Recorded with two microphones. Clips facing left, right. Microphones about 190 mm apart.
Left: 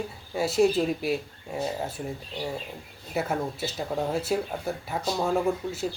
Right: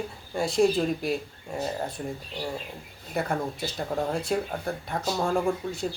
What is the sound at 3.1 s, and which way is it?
Speech, 5° left (ahead or behind).